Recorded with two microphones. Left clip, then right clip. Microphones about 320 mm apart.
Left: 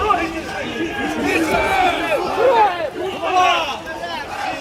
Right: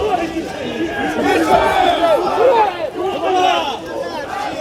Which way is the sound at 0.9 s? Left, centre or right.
Centre.